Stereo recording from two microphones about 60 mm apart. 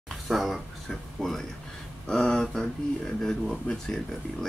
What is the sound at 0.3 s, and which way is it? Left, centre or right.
Speech, centre.